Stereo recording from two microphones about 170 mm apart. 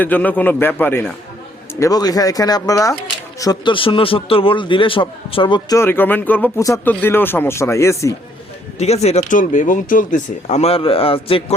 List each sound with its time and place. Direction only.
0.0 s a man's voice: 10° left (ahead or behind)
8.8 s speech: 40° left (ahead or behind)